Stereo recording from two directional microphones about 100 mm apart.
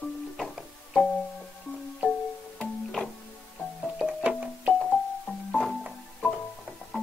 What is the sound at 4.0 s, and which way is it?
Music, 10° right (ahead or behind).